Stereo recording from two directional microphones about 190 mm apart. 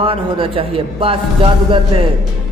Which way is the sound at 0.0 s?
30° right (ahead or behind).